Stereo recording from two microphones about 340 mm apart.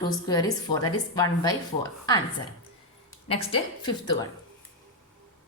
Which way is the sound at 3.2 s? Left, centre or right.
Centre.